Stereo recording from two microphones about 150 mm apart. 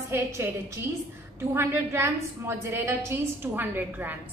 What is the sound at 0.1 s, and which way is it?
A woman's voice, 20° right (ahead or behind).